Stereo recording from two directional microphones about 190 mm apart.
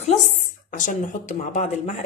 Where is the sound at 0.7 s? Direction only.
45° left (ahead or behind).